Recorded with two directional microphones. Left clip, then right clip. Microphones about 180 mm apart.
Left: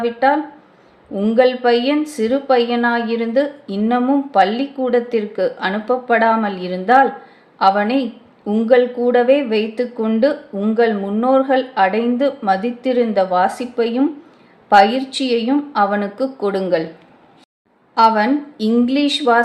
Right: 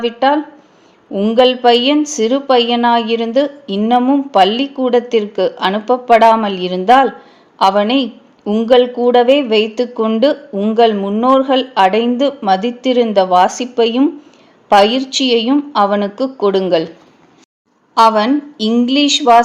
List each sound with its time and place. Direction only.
0.0 s speech: 35° right (ahead or behind)
17.9 s a woman's voice: 25° right (ahead or behind)